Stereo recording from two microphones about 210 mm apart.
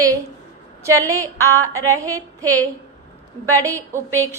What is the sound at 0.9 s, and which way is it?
A woman's voice, 15° right (ahead or behind).